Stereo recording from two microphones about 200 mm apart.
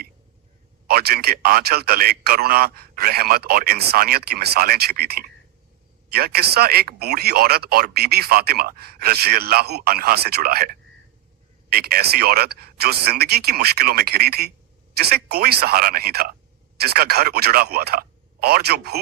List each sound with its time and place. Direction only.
0.9 s speech: 50° right (ahead or behind)